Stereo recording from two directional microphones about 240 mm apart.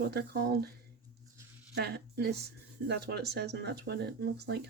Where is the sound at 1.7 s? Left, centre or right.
Right.